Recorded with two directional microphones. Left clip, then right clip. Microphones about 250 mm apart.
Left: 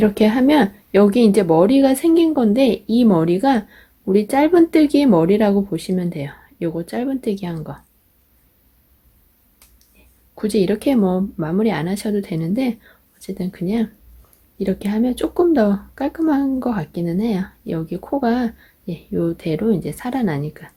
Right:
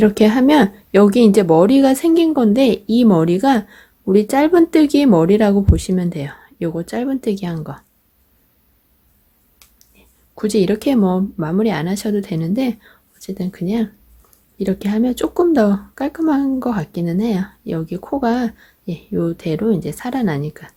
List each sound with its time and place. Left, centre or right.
0.0 s speech: centre
10.3 s speech: centre